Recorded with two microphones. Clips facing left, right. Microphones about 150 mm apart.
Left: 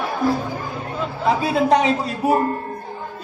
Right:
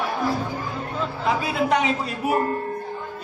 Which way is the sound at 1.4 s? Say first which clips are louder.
Left 6 dB; 35° left (ahead or behind).